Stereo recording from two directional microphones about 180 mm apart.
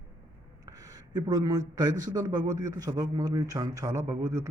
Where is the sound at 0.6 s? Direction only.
20° right (ahead or behind).